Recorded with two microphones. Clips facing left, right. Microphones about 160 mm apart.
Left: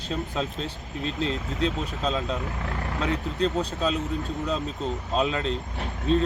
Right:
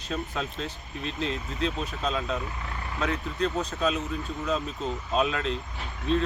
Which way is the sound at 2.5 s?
65° left (ahead or behind).